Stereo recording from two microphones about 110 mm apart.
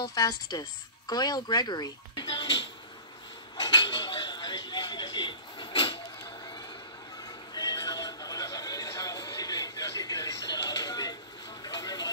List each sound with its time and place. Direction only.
0.1 s speech: 35° left (ahead or behind)
3.5 s dishes: 40° left (ahead or behind)
7.5 s music: 35° left (ahead or behind)
11.6 s vehicle: 35° left (ahead or behind)